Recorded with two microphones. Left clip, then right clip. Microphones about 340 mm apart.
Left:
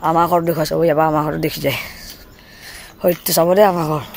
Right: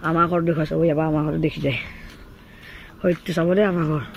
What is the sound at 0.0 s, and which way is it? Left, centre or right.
Speech, centre.